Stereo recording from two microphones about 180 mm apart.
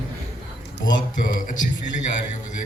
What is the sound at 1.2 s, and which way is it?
Speech, 45° left (ahead or behind).